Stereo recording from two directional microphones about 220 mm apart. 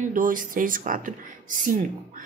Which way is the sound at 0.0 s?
35° right (ahead or behind).